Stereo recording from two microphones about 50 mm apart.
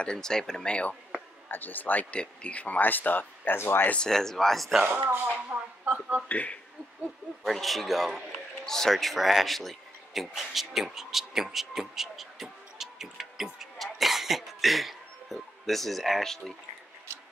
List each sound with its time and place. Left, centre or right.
0.0 s speech: centre
1.5 s speech: left
3.5 s speech: left
3.9 s speech: centre
5.5 s speech: right
5.9 s speech: right
6.2 s speech: left
7.4 s a man's voice: centre